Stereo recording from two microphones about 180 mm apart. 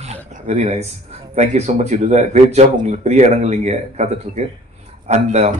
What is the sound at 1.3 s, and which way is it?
A man's voice, 40° right (ahead or behind).